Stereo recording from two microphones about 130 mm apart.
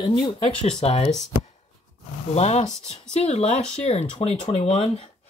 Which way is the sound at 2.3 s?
55° left (ahead or behind).